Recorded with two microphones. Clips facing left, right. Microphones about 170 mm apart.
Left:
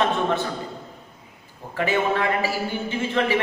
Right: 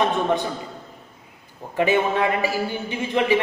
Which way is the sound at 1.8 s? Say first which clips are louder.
Right 3 dB; 20° right (ahead or behind).